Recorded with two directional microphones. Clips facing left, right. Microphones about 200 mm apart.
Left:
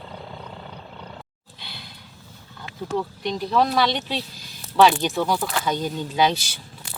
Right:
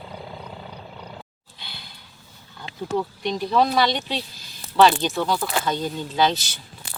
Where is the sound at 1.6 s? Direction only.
Centre (ahead or behind).